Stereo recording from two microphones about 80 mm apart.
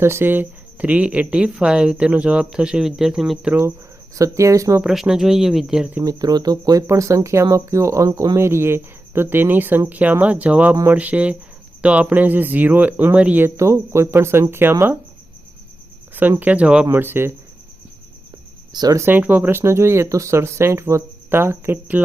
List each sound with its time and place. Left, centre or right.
0.0 s speech: right; by 3.5 s centre
4.1 s speech: right
4.8 s speech: centre
6.0 s speech: right
8.4 s speech: right; by 13.4 s centre
13.4 s speech: right
16.4 s speech: centre
16.9 s speech: right
18.7 s speech: right
18.9 s speech: right